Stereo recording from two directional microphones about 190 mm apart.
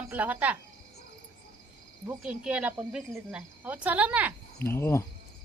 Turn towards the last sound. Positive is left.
turn(degrees=15)  # may be behind; listen again after turning